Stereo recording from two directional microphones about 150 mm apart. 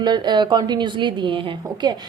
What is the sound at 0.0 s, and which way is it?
A woman's voice, 30° right (ahead or behind).